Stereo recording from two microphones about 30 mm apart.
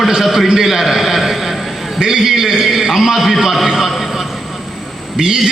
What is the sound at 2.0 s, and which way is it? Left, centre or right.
Speech, centre.